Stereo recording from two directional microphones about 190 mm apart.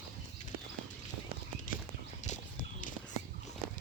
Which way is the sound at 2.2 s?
40° left (ahead or behind).